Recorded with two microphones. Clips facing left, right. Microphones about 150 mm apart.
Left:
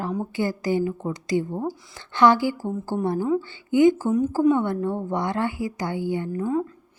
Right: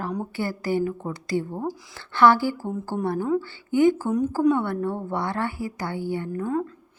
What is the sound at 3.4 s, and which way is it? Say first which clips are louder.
A woman's voice: left 3 dB; 20° left (ahead or behind).